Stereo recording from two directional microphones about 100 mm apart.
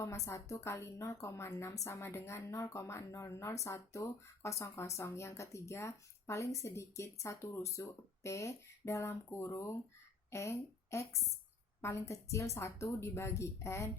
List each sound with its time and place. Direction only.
0.3 s a woman's voice: 30° left (ahead or behind)